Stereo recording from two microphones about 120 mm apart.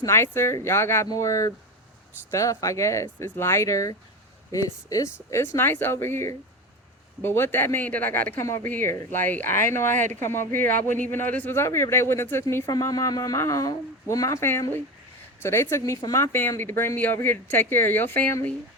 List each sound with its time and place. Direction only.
0.0 s speech: 20° left (ahead or behind)
9.9 s speech: 90° right
10.2 s speech: 20° left (ahead or behind)
10.5 s speech: 90° right
11.0 s speech: 15° left (ahead or behind)